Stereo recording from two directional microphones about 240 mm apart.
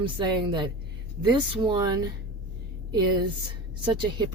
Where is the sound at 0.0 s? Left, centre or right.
Centre.